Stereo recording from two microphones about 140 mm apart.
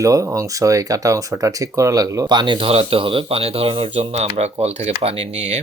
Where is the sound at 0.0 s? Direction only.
25° right (ahead or behind).